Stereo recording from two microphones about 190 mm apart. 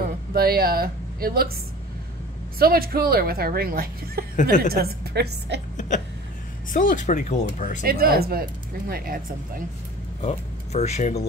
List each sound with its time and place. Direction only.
0.3 s speech: 50° right (ahead or behind)
2.6 s a woman's voice: 50° right (ahead or behind)
5.8 s hiccup: 40° left (ahead or behind)
6.7 s speech: 45° left (ahead or behind)
7.8 s a woman's voice: 50° right (ahead or behind)
10.2 s speech: 35° left (ahead or behind)